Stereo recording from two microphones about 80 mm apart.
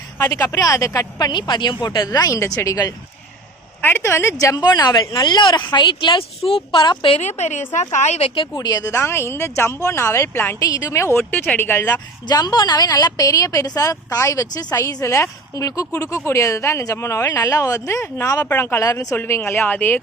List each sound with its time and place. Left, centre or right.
0.2 s speech: left
0.5 s speech: left
1.2 s a woman's voice: left
2.4 s a woman's voice: left
3.8 s speech: left
6.7 s speech: left
8.5 s a woman's voice: left
8.9 s speech: left
10.6 s a woman's voice: left
11.3 s speech: left
12.3 s a woman's voice: left
15.0 s speech: left
18.9 s a woman's voice: left
19.1 s speech: left